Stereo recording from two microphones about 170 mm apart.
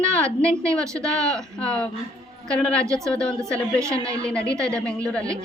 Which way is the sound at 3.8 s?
20° right (ahead or behind).